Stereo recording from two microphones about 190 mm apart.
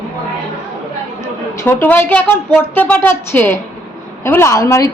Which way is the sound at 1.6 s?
10° left (ahead or behind).